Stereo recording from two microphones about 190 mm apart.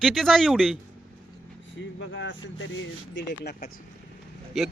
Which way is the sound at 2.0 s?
75° left (ahead or behind).